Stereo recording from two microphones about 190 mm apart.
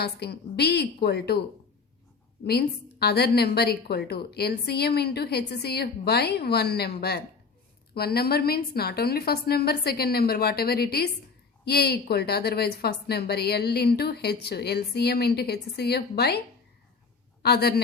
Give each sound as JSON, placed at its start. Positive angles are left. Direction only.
{"t": 0.0, "sound": "a woman's voice", "side_deg": 60}
{"t": 2.4, "sound": "a woman's voice", "side_deg": 55}
{"t": 17.4, "sound": "a woman's voice", "side_deg": 55}